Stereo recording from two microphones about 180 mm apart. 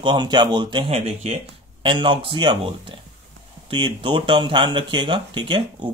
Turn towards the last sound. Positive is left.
turn(degrees=-25)  # may be behind; listen again after turning